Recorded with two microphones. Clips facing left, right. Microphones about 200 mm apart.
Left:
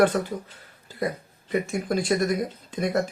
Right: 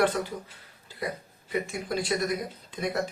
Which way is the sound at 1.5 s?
45° left (ahead or behind).